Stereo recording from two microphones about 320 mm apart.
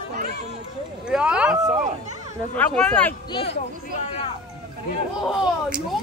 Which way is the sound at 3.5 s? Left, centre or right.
Left.